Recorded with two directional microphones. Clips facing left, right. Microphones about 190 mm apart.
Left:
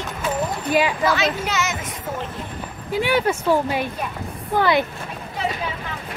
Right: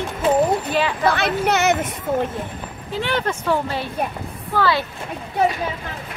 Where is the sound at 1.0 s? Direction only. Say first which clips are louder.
Right 2 dB; 60° right (ahead or behind).